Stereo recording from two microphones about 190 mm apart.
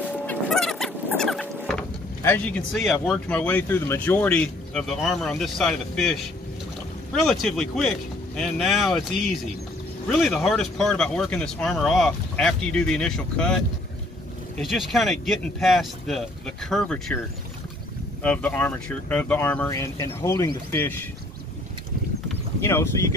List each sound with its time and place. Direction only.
0.3 s a sound: centre (ahead or behind)
7.2 s speech: centre (ahead or behind)
10.0 s speech: centre (ahead or behind)
14.6 s speech: centre (ahead or behind)
18.2 s speech: 10° left (ahead or behind)
22.6 s speech: 15° left (ahead or behind)